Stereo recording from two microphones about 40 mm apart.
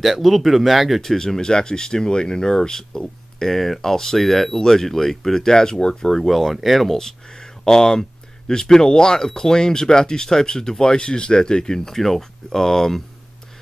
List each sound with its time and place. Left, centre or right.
0.0 s speech: centre
1.0 s speech: centre
6.2 s speech: centre